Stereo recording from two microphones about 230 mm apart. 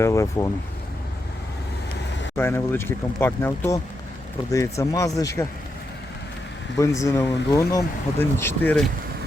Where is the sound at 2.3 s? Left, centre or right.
Centre.